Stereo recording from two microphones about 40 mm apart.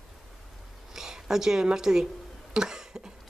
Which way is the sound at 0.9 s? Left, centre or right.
Centre.